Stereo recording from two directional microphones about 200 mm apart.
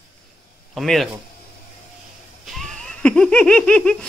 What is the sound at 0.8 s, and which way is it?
Speech, centre (ahead or behind).